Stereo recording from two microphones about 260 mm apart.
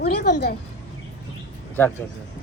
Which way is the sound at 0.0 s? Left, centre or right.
Left.